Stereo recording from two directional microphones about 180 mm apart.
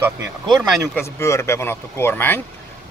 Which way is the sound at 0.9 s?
15° left (ahead or behind).